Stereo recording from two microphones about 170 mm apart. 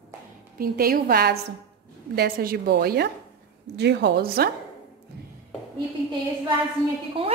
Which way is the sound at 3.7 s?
80° right.